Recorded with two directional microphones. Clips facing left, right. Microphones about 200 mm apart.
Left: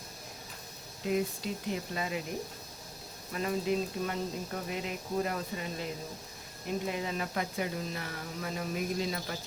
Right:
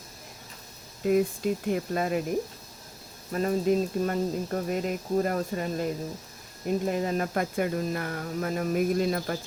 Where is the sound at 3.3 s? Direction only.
45° right (ahead or behind).